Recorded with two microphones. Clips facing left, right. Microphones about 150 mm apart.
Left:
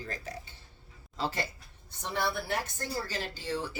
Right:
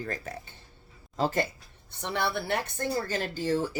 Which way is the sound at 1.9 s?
65° right (ahead or behind).